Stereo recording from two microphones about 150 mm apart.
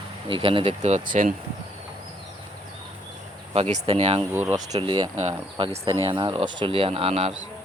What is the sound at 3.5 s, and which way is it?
Speech, 45° right (ahead or behind).